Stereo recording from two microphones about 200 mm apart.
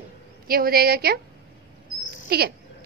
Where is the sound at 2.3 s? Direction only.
50° right (ahead or behind).